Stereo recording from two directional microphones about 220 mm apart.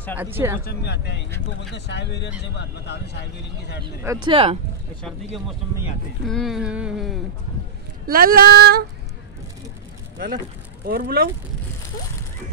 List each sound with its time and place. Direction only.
0.2 s speech: 10° right (ahead or behind)
0.7 s speech: 50° left (ahead or behind)
4.0 s speech: 15° right (ahead or behind)
6.2 s a sound: centre (ahead or behind)
8.1 s speech: 40° right (ahead or behind)
10.1 s speech: 40° right (ahead or behind)